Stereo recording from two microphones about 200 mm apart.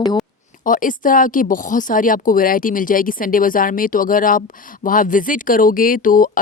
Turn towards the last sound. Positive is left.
turn(degrees=45)  # may be behind; listen again after turning